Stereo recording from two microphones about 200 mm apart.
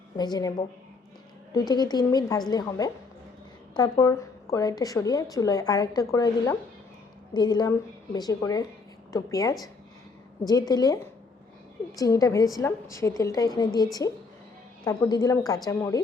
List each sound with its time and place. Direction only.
0.2 s a woman's voice: 20° left (ahead or behind)
1.5 s a woman's voice: 20° left (ahead or behind)